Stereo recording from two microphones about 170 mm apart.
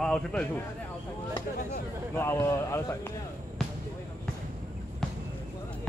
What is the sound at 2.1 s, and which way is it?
Speech, 15° left (ahead or behind).